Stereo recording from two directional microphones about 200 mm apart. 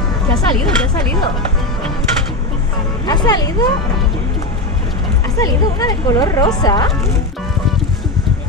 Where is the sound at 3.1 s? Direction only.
20° left (ahead or behind).